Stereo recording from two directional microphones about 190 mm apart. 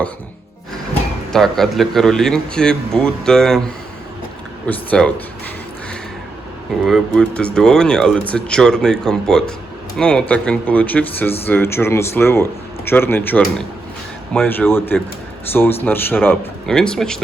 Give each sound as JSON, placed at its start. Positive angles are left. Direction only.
{"t": 1.3, "sound": "speech", "side_deg": 0}
{"t": 4.6, "sound": "a man's voice", "side_deg": 5}
{"t": 6.8, "sound": "a man's voice", "side_deg": 0}